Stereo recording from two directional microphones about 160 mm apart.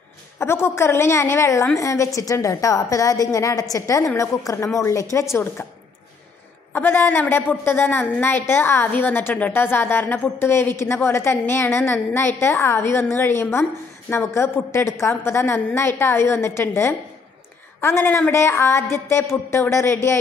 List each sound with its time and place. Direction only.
0.4 s a woman's voice: 15° left (ahead or behind)
6.7 s a woman's voice: 15° left (ahead or behind)